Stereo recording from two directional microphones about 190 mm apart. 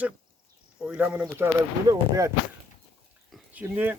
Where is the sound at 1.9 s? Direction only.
15° right (ahead or behind).